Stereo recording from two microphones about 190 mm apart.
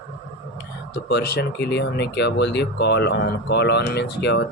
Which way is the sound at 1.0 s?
60° left (ahead or behind).